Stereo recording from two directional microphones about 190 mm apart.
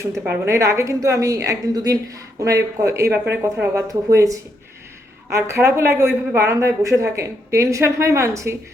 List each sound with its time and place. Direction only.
0.0 s a woman's voice: 15° right (ahead or behind)